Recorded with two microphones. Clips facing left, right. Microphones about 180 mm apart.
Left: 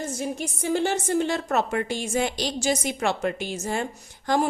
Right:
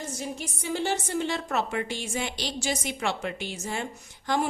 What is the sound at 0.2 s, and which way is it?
A woman's voice, 50° left (ahead or behind).